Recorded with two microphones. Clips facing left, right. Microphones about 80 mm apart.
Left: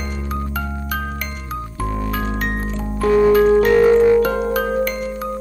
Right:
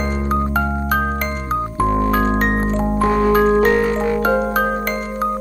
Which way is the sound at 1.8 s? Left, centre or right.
Right.